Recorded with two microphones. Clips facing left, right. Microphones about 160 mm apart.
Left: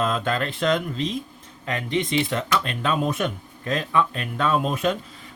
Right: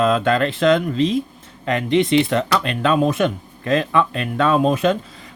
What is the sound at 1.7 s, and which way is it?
Speech, 75° right (ahead or behind).